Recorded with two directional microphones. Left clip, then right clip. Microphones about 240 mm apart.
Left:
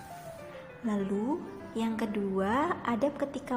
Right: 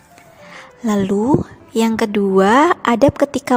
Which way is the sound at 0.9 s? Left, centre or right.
Right.